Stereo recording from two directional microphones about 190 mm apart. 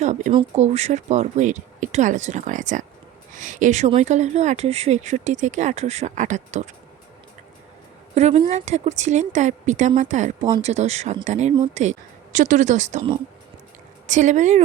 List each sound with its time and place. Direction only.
0.0 s speech: 40° right (ahead or behind)
8.1 s speech: 35° right (ahead or behind)